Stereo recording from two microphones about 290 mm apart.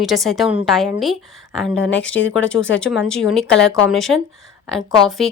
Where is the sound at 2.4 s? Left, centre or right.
Centre.